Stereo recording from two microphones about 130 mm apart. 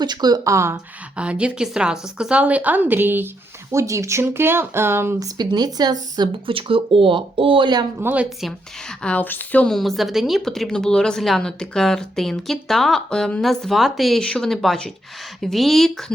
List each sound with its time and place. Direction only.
0.0 s speech: 35° right (ahead or behind)
1.1 s a woman's voice: 10° right (ahead or behind)
5.4 s speech: 30° right (ahead or behind)
7.9 s a woman's voice: 15° right (ahead or behind)
9.0 s a woman's voice: 15° left (ahead or behind)